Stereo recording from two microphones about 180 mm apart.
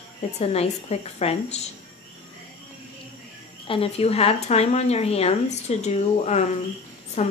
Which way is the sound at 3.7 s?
35° left (ahead or behind).